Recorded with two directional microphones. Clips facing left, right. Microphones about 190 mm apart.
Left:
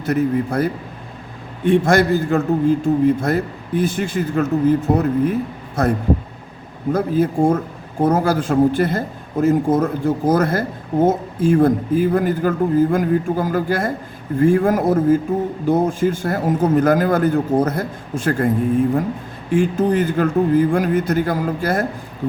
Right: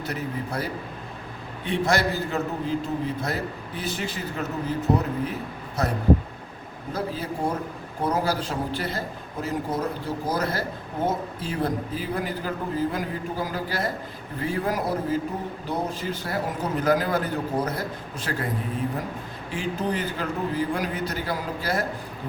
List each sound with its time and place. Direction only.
0.0 s a man's voice: 50° left (ahead or behind)